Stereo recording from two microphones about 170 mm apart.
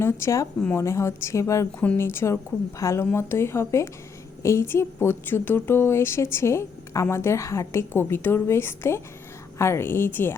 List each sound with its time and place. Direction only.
0.0 s a woman's voice: 15° left (ahead or behind)